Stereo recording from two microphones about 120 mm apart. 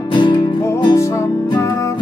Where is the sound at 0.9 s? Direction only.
25° left (ahead or behind).